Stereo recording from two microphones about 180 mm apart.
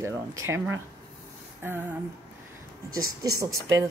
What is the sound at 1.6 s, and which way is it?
Speech, 10° right (ahead or behind).